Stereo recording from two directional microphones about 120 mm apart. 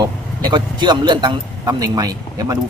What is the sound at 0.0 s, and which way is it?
A man's voice, 35° right (ahead or behind).